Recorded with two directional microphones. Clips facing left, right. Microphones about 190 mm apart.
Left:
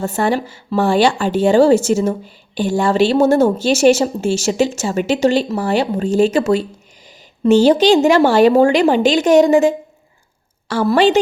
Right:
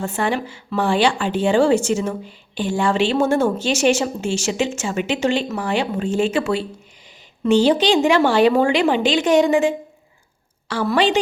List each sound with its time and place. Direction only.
0.0 s a woman's voice: 40° left (ahead or behind)